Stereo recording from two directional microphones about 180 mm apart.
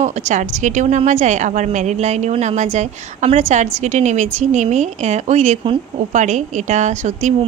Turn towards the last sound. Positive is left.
turn(degrees=-40)  # may be behind; listen again after turning